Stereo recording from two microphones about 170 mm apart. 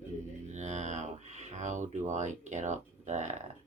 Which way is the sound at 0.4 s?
45° right (ahead or behind).